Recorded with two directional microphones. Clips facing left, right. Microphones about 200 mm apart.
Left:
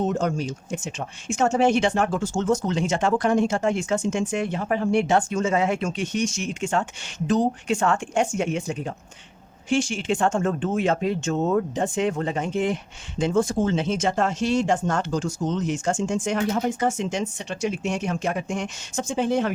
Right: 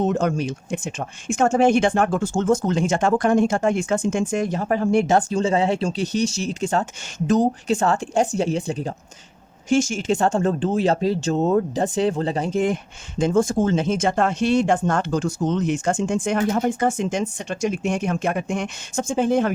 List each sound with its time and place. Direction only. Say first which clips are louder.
0.1 s speech: right 3 dB; 65° right (ahead or behind); by 19.5 s 50° right (ahead or behind)